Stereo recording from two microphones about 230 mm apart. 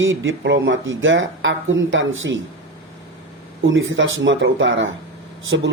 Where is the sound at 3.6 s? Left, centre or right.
Right.